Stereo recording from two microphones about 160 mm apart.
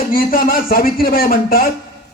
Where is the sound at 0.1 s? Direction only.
65° left (ahead or behind).